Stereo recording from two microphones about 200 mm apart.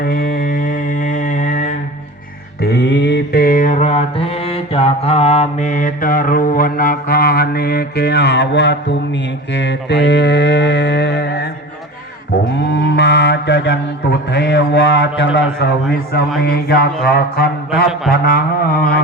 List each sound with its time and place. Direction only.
0.0 s mantra: 45° left (ahead or behind)
2.6 s mantra: 60° left (ahead or behind)
9.5 s a sound: 60° left (ahead or behind)
12.7 s mantra: 60° left (ahead or behind)